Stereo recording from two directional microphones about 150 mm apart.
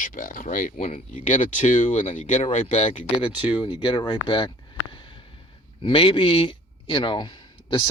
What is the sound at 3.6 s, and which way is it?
Speech, 30° left (ahead or behind).